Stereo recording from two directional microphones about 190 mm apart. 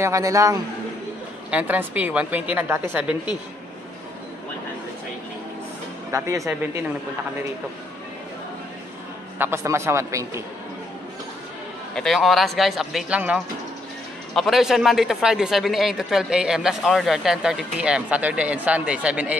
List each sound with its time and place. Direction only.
0.0 s a woman's voice: 15° right (ahead or behind)
6.1 s a woman's voice: 15° right (ahead or behind)
9.4 s a woman's voice: 15° right (ahead or behind)
11.9 s speech: centre (ahead or behind)